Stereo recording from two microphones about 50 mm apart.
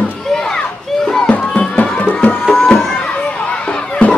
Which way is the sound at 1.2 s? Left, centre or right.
Left.